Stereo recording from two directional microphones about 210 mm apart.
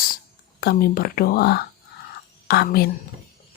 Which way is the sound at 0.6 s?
45° left (ahead or behind).